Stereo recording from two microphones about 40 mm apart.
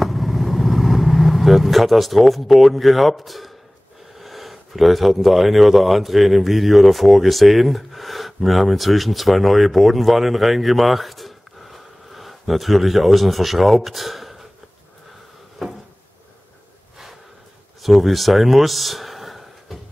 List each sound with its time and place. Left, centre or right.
0.0 s vehicle: centre
4.2 s speech: centre
15.6 s cupboard open or close: centre
17.8 s speech: centre